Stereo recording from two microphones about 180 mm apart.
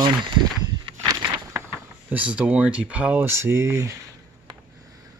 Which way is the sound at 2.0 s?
5° right (ahead or behind).